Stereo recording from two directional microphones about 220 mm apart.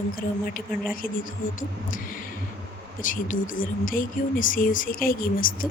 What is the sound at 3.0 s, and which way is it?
Speech, 35° left (ahead or behind).